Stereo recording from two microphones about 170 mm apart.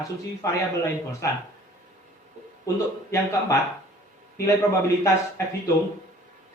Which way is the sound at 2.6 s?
15° left (ahead or behind).